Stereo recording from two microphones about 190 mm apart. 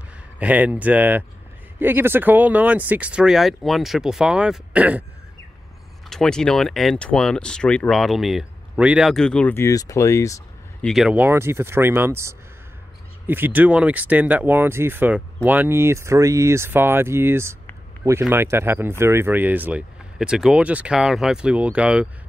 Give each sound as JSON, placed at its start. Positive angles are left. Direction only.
{"t": 0.4, "sound": "speech", "side_deg": -5}
{"t": 6.0, "sound": "speech", "side_deg": 5}
{"t": 10.9, "sound": "speech", "side_deg": -5}